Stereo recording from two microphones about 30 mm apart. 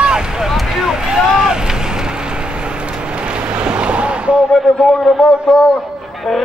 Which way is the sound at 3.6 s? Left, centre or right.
Right.